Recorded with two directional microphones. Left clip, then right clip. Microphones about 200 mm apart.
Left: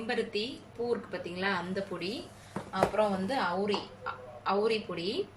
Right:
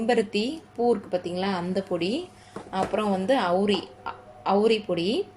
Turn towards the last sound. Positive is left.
turn(degrees=-35)  # may be behind; listen again after turning